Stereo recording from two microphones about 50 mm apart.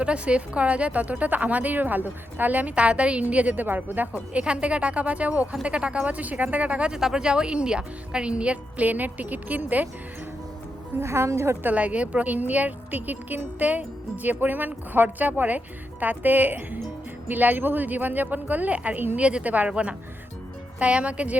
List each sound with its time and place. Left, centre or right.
0.0 s a woman's voice: right
4.4 s a woman's voice: right
6.9 s a woman's voice: centre; by 9.8 s right
11.0 s a woman's voice: right
11.7 s a woman's voice: right